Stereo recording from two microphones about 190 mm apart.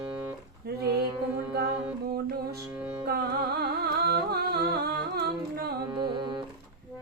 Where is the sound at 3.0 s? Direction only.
55° right (ahead or behind).